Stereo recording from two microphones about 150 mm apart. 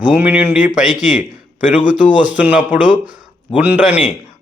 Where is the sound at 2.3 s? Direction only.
10° right (ahead or behind).